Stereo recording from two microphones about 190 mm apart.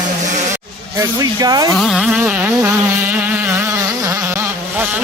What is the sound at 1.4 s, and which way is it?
Speech, 20° right (ahead or behind).